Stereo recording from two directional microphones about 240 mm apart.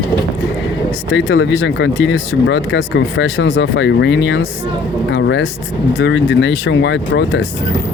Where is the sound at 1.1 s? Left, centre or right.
Left.